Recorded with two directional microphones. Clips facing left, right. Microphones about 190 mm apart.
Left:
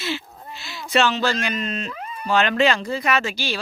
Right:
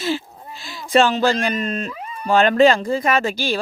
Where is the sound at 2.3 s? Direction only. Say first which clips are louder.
Right 5 dB; 45° right (ahead or behind).